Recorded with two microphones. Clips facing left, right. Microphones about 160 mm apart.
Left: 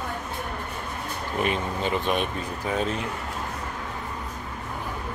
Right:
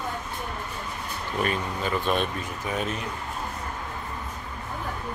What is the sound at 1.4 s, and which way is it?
Speech, 20° left (ahead or behind).